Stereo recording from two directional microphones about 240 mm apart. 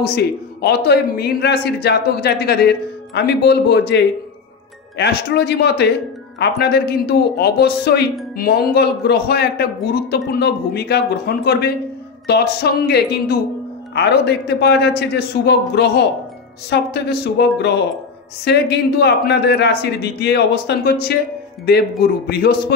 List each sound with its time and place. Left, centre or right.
0.0 s a man's voice: left